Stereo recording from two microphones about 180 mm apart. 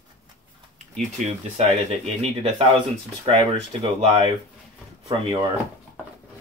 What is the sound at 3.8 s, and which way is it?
Speech, 35° right (ahead or behind).